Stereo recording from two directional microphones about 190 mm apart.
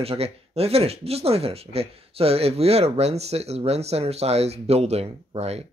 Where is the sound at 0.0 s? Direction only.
30° right (ahead or behind).